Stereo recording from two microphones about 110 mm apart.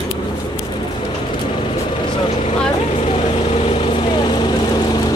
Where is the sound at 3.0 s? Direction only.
65° left (ahead or behind).